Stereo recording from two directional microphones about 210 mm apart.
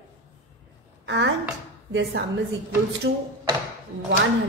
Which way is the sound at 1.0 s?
55° right (ahead or behind).